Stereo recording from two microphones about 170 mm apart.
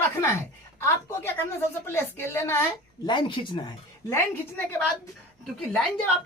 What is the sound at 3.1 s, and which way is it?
Speech, 25° left (ahead or behind).